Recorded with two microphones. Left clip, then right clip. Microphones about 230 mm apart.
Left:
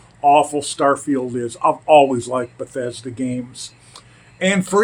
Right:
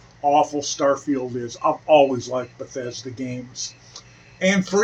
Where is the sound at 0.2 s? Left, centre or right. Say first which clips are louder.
Left 5 dB; left.